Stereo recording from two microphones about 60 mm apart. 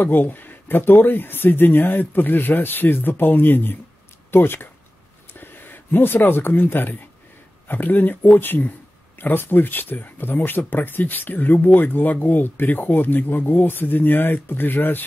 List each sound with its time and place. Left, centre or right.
0.0 s speech: left